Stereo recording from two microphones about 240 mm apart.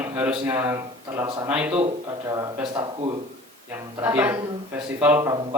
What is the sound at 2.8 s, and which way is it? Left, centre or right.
Speech, centre.